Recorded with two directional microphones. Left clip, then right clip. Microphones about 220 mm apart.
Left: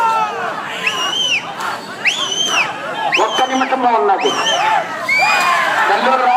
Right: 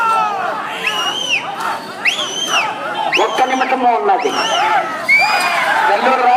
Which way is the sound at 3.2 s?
50° right (ahead or behind).